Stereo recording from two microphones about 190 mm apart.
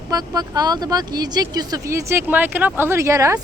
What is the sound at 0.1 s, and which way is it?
Speech, 20° right (ahead or behind).